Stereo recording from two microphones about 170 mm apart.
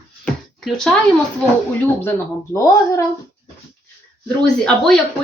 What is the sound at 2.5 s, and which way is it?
Speech, 20° left (ahead or behind).